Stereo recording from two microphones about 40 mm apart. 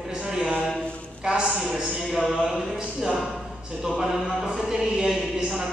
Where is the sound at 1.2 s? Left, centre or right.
Centre.